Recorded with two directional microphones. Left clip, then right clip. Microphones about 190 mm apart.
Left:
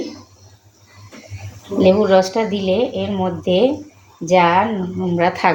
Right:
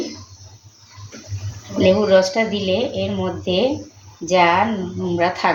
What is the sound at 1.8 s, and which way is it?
A woman's voice, 40° left (ahead or behind).